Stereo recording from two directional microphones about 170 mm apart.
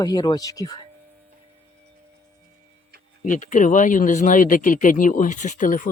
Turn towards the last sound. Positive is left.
turn(degrees=50)  # may be behind; listen again after turning